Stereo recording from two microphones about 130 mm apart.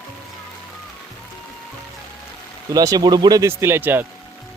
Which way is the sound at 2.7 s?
30° right (ahead or behind).